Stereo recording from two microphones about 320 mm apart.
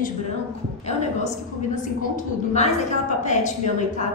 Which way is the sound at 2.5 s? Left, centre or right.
Left.